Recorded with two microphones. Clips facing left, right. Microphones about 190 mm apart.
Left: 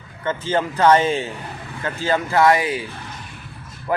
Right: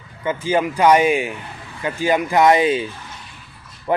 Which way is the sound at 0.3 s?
10° right (ahead or behind).